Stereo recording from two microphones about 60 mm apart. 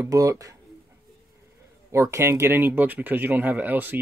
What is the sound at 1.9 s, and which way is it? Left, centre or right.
Speech, right.